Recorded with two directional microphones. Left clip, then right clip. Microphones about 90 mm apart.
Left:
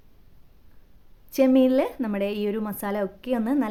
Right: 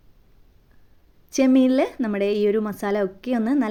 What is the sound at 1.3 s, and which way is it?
A woman's voice, 30° right (ahead or behind).